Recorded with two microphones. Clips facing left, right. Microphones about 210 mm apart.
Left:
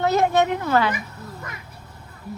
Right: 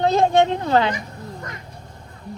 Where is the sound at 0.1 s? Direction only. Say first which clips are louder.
Right 2 dB; 20° right (ahead or behind).